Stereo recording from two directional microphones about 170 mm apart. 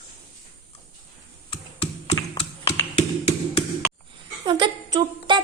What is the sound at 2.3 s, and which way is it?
Tap, 30° left (ahead or behind).